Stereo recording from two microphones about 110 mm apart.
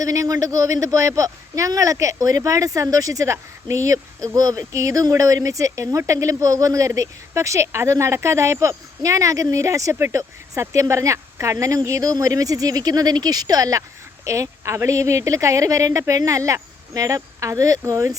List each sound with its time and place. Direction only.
0.0 s a man's voice: 30° right (ahead or behind)